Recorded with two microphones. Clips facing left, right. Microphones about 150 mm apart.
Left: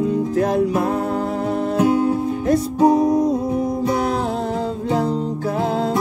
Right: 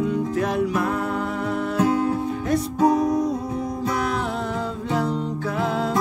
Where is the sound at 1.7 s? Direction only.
25° left (ahead or behind).